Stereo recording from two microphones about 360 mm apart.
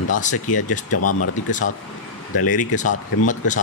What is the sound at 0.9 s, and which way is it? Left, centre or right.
Speech, left.